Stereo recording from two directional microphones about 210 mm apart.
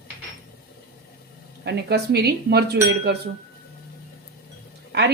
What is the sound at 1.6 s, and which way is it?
Speech, 50° right (ahead or behind).